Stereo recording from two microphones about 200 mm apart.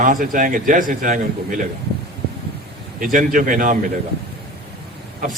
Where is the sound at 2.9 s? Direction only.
45° right (ahead or behind).